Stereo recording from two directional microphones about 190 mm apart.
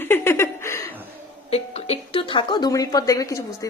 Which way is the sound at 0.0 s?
15° left (ahead or behind).